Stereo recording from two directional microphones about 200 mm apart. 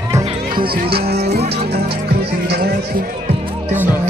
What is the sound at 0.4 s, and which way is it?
Speech, 45° right (ahead or behind).